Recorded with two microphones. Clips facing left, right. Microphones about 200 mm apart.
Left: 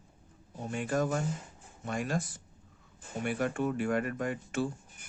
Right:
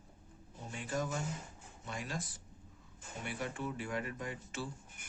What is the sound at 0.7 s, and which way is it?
Speech, 60° left (ahead or behind).